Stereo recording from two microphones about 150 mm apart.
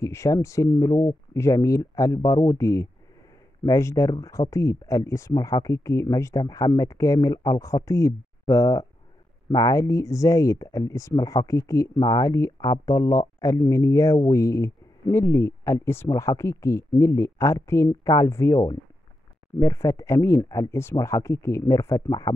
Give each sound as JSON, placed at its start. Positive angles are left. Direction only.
{"t": 0.0, "sound": "speech", "side_deg": 20}